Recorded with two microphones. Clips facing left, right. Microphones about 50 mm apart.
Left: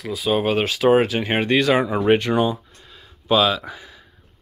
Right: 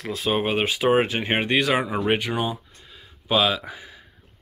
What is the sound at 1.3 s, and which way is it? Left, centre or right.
Speech, centre.